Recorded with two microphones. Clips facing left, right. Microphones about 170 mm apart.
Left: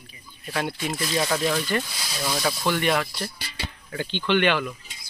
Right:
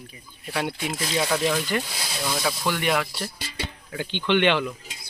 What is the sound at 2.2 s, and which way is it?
Speech, 5° left (ahead or behind).